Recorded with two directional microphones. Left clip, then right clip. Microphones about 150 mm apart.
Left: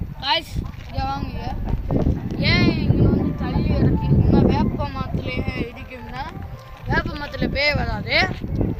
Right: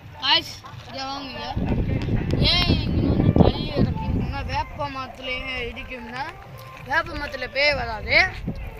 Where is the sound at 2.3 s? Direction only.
45° left (ahead or behind).